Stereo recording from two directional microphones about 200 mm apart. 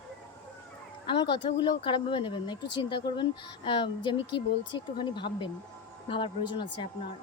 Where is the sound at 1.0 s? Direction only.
25° left (ahead or behind).